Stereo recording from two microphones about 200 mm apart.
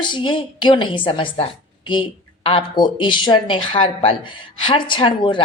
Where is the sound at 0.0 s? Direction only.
25° left (ahead or behind).